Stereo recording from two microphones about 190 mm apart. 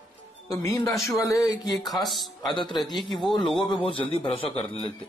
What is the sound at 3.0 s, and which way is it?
Speech, centre (ahead or behind).